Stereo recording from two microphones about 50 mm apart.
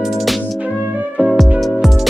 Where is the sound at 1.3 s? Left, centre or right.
Centre.